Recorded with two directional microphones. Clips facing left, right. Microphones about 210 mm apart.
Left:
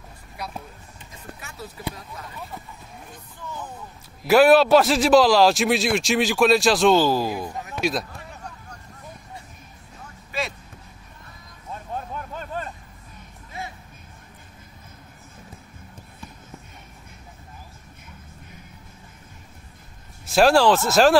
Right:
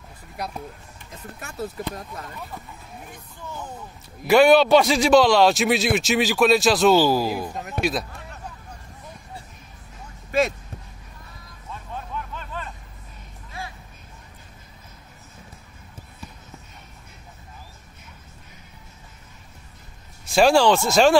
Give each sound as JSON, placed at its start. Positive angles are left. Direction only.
{"t": 1.4, "sound": "speech", "side_deg": -50}
{"t": 4.3, "sound": "a man's voice", "side_deg": 5}
{"t": 11.7, "sound": "vehicle", "side_deg": 40}
{"t": 20.3, "sound": "a man's voice", "side_deg": 0}